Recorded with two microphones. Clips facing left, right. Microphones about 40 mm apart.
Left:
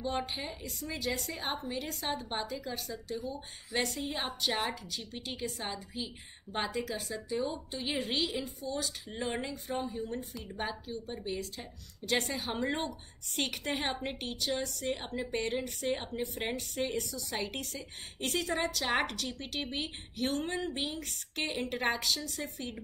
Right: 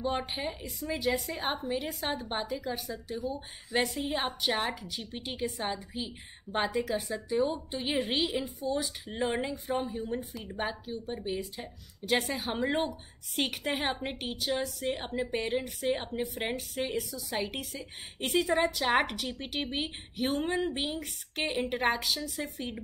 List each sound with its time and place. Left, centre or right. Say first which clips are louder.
0.0 s a woman's voice: right 3 dB; centre